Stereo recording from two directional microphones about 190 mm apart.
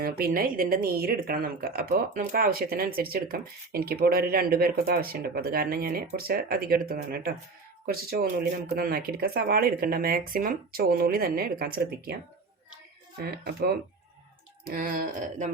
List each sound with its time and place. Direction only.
0.0 s a woman's voice: 50° right (ahead or behind)
13.3 s a woman's voice: 55° right (ahead or behind)